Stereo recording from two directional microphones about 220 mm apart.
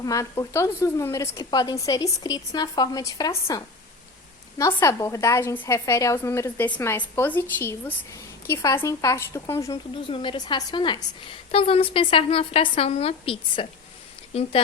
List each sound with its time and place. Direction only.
0.0 s a woman's voice: 15° left (ahead or behind)